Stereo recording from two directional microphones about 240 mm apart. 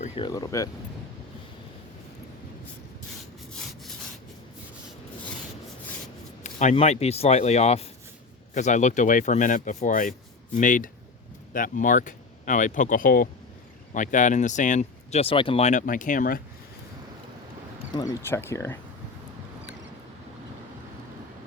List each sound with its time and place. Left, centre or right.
0.0 s speech: centre
6.4 s speech: left
17.9 s speech: centre